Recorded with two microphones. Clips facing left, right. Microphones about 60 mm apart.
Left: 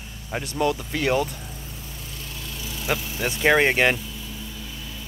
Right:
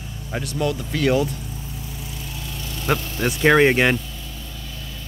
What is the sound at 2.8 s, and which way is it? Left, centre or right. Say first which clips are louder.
Speech: right 4 dB; centre.